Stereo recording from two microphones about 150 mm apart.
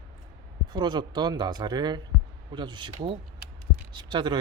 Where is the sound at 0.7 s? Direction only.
30° right (ahead or behind).